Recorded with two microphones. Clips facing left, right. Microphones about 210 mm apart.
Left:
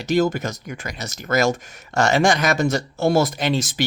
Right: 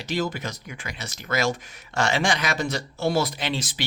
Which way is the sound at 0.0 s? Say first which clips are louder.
Left 8 dB; 45° left (ahead or behind).